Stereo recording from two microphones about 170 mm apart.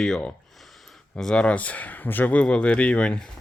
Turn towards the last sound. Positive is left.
turn(degrees=5)  # may be behind; listen again after turning